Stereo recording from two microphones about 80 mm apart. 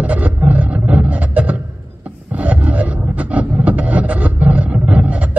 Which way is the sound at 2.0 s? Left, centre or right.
Centre.